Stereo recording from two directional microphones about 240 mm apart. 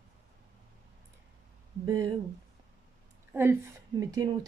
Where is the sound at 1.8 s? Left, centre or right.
Centre.